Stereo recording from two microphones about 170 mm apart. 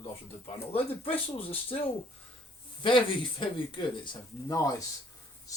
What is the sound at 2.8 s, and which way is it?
Speech, 30° left (ahead or behind).